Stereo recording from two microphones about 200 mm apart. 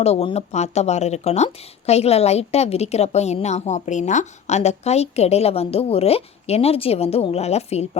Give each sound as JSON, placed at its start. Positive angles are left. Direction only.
{"t": 0.0, "sound": "speech", "side_deg": 30}